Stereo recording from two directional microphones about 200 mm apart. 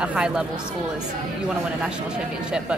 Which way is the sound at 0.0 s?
5° right (ahead or behind).